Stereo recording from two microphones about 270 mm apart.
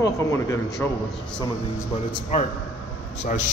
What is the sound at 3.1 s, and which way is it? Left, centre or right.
Speech, left.